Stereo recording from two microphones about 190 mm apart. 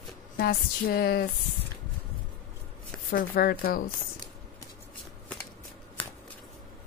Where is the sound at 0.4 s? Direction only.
50° left (ahead or behind).